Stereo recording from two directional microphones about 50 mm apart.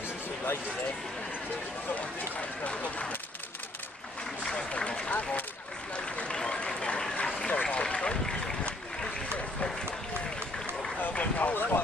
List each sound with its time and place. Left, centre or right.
2.6 s speech: left
4.4 s speech: centre
5.9 s a sound: left
7.2 s vehicle: centre
8.6 s boat: left
11.1 s a sound: left
11.5 s speech: left